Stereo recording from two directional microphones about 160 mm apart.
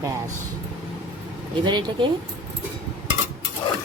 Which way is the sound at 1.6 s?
30° right (ahead or behind).